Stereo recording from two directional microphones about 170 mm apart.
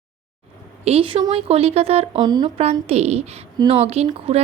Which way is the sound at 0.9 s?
30° right (ahead or behind).